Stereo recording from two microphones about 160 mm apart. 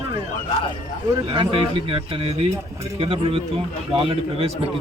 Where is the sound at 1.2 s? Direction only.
35° right (ahead or behind).